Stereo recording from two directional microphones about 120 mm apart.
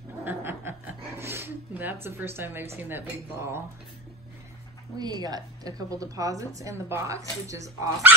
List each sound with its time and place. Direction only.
0.2 s chuckle: 15° right (ahead or behind)
2.0 s a woman's voice: 20° right (ahead or behind)
4.9 s a woman's voice: 35° right (ahead or behind)